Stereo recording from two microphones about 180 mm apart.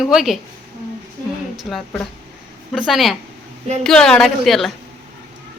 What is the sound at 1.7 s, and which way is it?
A woman's voice, centre (ahead or behind).